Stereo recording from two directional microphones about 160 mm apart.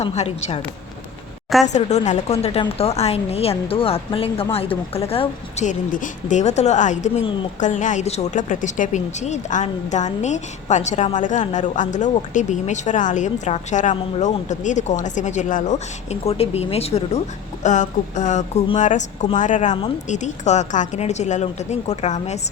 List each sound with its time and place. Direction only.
0.0 s a woman's voice: 40° left (ahead or behind)
1.6 s a woman's voice: 45° left (ahead or behind)
5.6 s a woman's voice: 55° left (ahead or behind)
17.6 s a woman's voice: 50° left (ahead or behind)